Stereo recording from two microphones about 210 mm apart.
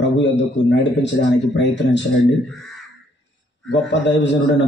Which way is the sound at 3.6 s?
60° left (ahead or behind).